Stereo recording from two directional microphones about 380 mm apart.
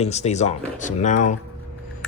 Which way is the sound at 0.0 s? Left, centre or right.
Centre.